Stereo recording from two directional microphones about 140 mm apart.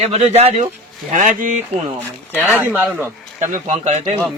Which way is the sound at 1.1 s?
60° right (ahead or behind).